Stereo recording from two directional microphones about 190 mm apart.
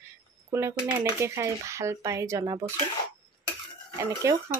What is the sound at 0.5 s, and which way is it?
Speech, 15° right (ahead or behind).